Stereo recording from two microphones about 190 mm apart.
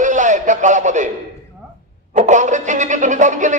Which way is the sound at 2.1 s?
40° right (ahead or behind).